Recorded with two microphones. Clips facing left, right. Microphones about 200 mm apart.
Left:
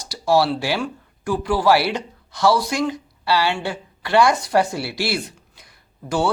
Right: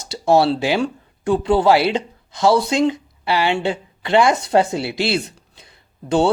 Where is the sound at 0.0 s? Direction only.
25° right (ahead or behind).